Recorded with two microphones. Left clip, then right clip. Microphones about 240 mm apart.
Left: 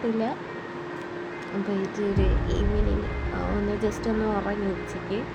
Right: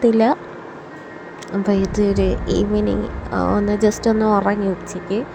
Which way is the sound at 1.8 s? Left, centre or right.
Right.